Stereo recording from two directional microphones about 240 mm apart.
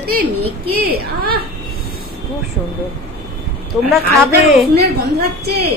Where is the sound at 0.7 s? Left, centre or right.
Right.